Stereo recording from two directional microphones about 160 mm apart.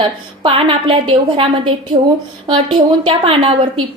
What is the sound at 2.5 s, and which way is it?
Speech, 30° right (ahead or behind).